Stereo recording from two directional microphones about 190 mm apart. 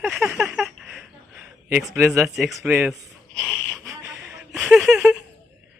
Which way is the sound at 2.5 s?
10° right (ahead or behind).